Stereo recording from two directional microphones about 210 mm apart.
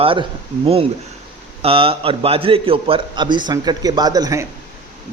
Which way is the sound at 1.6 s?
25° right (ahead or behind).